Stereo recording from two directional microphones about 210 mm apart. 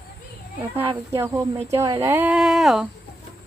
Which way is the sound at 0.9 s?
15° right (ahead or behind).